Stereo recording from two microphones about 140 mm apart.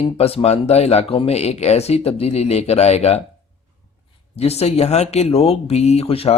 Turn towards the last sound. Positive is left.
turn(degrees=45)  # may be behind; listen again after turning